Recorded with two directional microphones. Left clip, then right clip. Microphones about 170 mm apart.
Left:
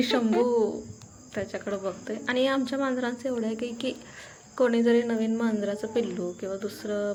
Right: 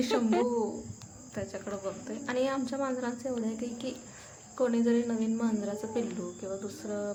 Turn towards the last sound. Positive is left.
turn(degrees=15)  # may be behind; listen again after turning